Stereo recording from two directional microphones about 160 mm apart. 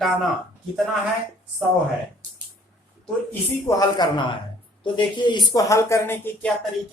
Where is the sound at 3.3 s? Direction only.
15° left (ahead or behind).